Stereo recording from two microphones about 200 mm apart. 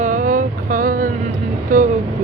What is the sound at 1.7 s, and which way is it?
Vehicle, 40° right (ahead or behind).